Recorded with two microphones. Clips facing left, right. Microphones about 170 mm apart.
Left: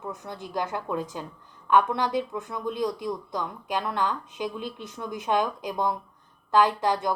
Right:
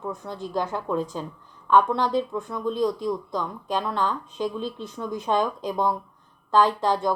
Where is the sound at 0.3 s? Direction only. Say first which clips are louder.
Right 2 dB; 15° left (ahead or behind).